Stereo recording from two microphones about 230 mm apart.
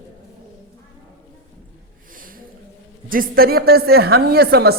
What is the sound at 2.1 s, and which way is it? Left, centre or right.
Snort, right.